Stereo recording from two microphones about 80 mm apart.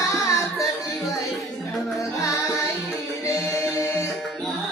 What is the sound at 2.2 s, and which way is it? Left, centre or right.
Music, left.